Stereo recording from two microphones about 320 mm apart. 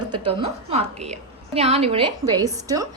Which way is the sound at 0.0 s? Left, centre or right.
Centre.